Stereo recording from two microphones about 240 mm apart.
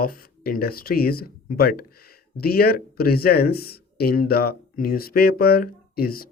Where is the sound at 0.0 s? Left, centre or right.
Left.